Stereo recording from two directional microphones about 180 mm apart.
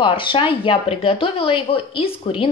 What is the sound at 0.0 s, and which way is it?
A woman's voice, 30° left (ahead or behind).